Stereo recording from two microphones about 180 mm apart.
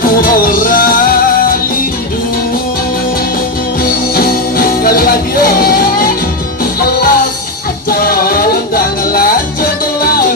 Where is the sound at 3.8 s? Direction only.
55° left (ahead or behind).